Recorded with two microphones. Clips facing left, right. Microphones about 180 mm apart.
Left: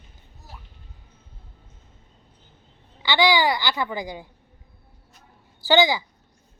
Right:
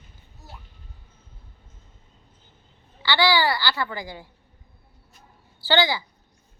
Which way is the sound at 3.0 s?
15° left (ahead or behind).